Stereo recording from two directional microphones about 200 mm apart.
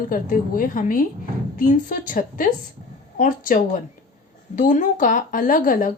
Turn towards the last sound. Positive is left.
turn(degrees=45)  # may be behind; listen again after turning